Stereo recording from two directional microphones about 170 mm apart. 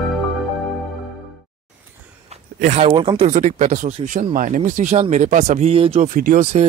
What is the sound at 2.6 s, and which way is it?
Speech, 40° right (ahead or behind).